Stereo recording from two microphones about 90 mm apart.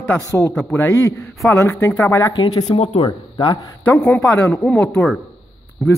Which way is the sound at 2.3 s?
60° left (ahead or behind).